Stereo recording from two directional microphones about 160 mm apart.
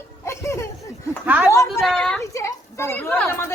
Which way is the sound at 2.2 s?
20° left (ahead or behind).